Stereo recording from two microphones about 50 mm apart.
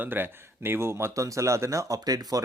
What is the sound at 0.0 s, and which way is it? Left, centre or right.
Speech, right.